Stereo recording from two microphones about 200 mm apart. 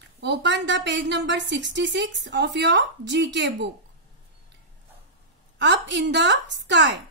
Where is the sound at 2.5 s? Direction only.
60° right (ahead or behind).